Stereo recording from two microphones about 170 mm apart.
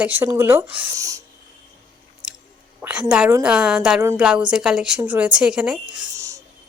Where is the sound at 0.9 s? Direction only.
20° right (ahead or behind).